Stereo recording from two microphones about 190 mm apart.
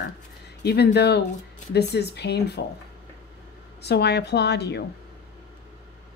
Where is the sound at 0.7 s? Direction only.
60° left (ahead or behind).